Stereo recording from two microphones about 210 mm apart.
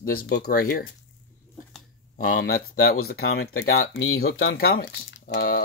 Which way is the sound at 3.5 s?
75° left (ahead or behind).